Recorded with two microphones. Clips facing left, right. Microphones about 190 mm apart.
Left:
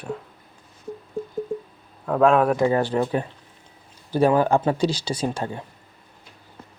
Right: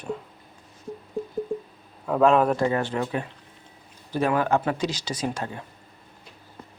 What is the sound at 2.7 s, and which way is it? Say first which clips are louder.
Speech: left 4 dB; 35° left (ahead or behind).